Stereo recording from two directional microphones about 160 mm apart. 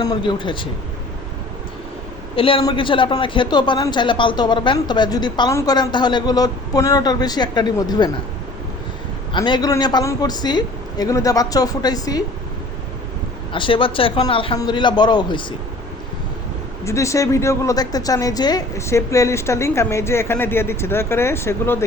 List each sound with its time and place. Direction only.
0.0 s speech: 30° left (ahead or behind)
2.3 s a man's voice: 35° left (ahead or behind)
9.3 s a man's voice: 30° left (ahead or behind)
13.5 s a man's voice: 30° left (ahead or behind)
16.8 s a woman's voice: 20° left (ahead or behind)